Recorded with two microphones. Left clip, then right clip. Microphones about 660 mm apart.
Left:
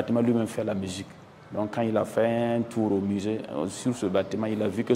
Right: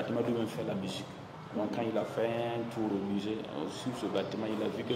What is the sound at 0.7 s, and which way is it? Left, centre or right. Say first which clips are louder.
Speech: left 5 dB; left.